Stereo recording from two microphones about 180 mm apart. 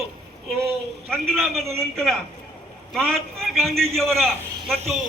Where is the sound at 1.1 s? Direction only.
Centre (ahead or behind).